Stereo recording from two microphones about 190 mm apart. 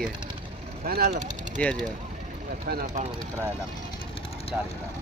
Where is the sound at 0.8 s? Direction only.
55° right (ahead or behind).